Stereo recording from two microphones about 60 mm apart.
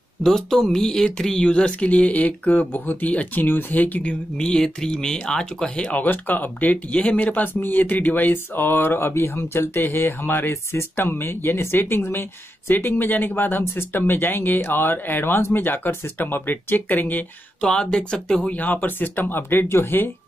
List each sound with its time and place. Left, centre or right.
0.2 s speech: centre
5.9 s speech: left
17.6 s speech: centre
18.5 s speech: left